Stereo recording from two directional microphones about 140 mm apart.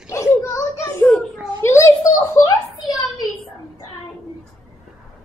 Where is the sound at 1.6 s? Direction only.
20° left (ahead or behind).